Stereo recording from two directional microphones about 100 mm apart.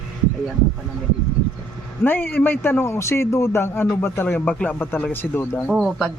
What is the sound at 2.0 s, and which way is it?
A man's voice, 20° left (ahead or behind).